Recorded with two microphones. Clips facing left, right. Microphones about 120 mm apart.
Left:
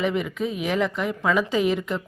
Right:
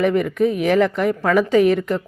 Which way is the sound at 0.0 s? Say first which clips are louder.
Right 7 dB; 55° right (ahead or behind).